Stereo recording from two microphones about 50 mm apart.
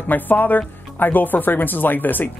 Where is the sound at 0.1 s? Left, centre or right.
Left.